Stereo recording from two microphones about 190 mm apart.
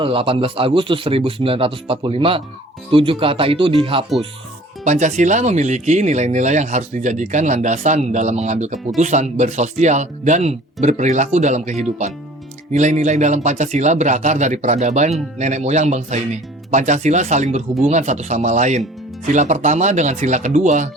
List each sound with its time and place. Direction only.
0.0 s speech: 30° right (ahead or behind)
4.8 s speech: 40° right (ahead or behind)